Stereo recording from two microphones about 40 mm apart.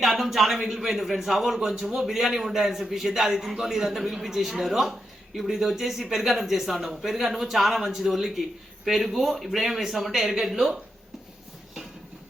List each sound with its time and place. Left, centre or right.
0.0 s speech: centre
1.5 s a man's voice: centre
10.5 s a man's voice: centre